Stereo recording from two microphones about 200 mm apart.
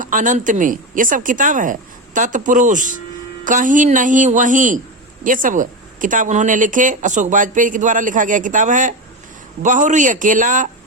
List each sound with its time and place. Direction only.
0.0 s speech: 40° right (ahead or behind)